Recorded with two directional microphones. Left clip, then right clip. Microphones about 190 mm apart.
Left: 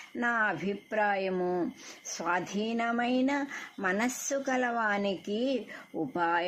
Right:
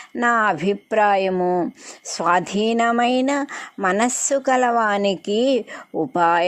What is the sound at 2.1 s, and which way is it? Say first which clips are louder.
A woman's voice: right 13 dB; 45° right (ahead or behind).